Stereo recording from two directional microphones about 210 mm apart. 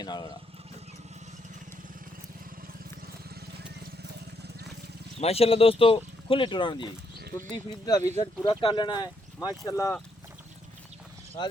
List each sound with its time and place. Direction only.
0.0 s speech: 20° left (ahead or behind)
5.2 s speech: 30° left (ahead or behind)